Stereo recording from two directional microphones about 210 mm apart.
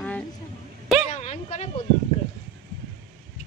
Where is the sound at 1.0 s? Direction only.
35° left (ahead or behind).